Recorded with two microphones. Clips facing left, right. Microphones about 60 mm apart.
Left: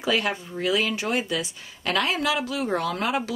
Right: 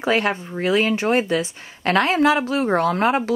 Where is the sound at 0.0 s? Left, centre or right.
Right.